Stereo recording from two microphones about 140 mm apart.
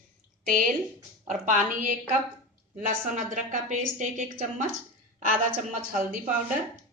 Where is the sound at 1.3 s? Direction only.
60° right (ahead or behind).